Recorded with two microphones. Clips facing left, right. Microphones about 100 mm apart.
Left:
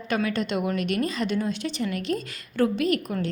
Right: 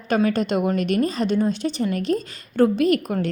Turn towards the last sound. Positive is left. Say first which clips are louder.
# right 5 dB
turn(degrees=-50)  # may be behind; listen again after turning